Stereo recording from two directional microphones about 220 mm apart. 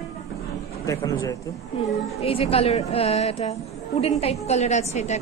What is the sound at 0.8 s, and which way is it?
Speech, 15° left (ahead or behind).